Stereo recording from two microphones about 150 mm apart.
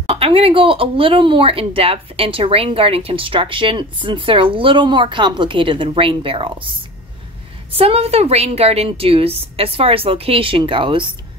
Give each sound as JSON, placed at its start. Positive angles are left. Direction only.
{"t": 0.1, "sound": "speech", "side_deg": -40}
{"t": 7.7, "sound": "speech", "side_deg": -40}